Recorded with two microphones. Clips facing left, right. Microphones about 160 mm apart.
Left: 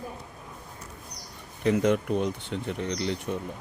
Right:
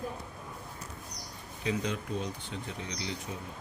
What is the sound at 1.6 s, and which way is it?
Speech, 60° left (ahead or behind).